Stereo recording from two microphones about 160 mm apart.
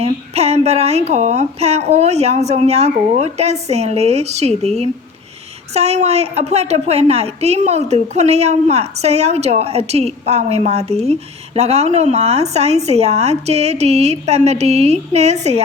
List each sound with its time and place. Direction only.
0.0 s a woman's voice: 40° right (ahead or behind)